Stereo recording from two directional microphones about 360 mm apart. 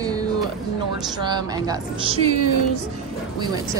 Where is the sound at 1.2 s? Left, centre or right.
Centre.